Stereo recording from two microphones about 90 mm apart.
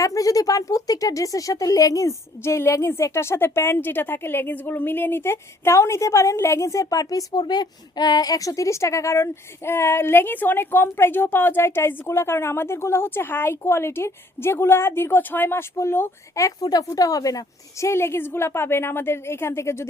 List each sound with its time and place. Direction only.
0.0 s speech: 40° left (ahead or behind)